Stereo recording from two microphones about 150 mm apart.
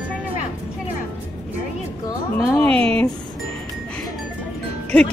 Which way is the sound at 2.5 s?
5° left (ahead or behind).